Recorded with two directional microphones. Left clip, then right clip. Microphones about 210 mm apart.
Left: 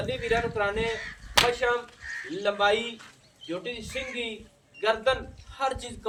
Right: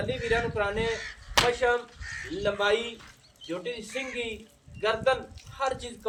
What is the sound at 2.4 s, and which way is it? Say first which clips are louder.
A man's voice: left 2 dB; 20° left (ahead or behind).